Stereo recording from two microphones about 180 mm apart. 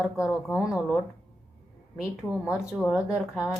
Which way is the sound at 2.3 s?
5° right (ahead or behind).